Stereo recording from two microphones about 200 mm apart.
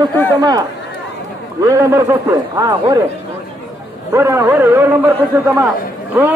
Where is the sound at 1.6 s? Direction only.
15° right (ahead or behind).